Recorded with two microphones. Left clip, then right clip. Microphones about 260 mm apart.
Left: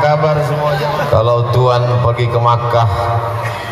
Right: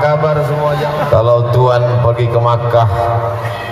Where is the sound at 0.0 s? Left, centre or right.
Right.